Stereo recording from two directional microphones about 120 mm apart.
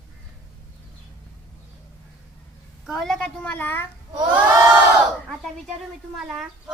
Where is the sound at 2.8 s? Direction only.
Centre (ahead or behind).